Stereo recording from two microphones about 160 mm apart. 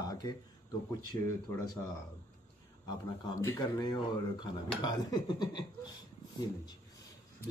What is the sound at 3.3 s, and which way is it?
Speech, 25° left (ahead or behind).